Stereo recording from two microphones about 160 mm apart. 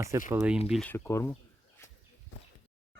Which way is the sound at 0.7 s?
10° left (ahead or behind).